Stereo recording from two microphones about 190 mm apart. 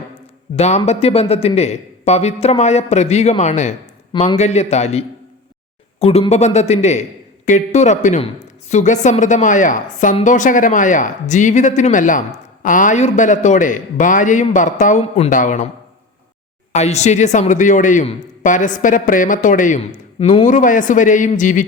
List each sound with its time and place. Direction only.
0.5 s speech: 35° left (ahead or behind)
16.7 s speech: 35° left (ahead or behind)